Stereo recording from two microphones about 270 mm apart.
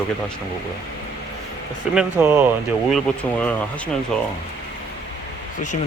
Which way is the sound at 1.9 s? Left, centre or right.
Centre.